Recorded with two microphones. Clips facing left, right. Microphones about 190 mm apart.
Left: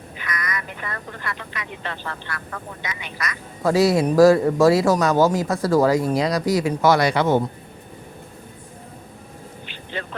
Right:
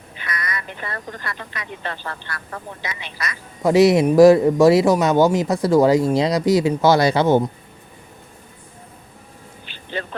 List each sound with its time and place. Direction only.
0.2 s speech: 30° right (ahead or behind)